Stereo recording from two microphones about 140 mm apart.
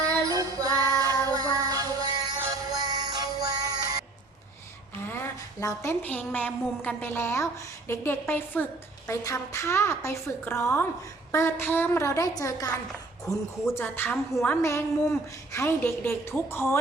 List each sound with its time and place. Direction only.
0.3 s child singing: 25° right (ahead or behind)
2.4 s music: 25° right (ahead or behind)
5.0 s a woman's voice: 15° left (ahead or behind)